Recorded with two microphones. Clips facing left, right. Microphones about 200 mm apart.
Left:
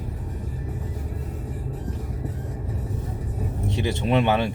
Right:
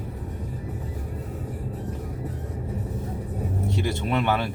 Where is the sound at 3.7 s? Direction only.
20° left (ahead or behind).